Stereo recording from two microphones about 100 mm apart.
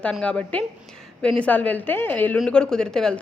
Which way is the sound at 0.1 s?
10° left (ahead or behind).